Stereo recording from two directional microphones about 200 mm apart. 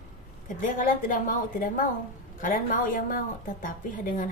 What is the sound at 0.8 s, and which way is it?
A woman's voice, 40° left (ahead or behind).